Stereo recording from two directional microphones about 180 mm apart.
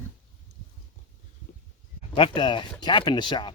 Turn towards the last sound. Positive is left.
turn(degrees=25)  # may be behind; listen again after turning